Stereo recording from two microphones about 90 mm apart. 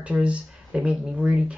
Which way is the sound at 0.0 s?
15° right (ahead or behind).